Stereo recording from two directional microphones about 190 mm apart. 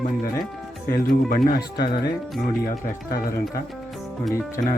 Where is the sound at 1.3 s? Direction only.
50° left (ahead or behind).